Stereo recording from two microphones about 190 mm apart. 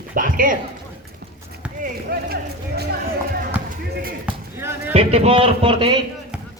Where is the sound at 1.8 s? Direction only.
45° right (ahead or behind).